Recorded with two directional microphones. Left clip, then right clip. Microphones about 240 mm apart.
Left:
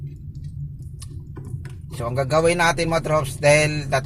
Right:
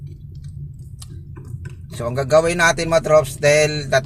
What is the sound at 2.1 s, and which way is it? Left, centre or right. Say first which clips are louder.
Speech: right 3 dB; centre.